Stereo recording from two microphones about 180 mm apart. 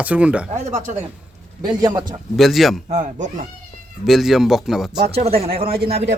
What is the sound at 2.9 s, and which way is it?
Speech, 45° right (ahead or behind).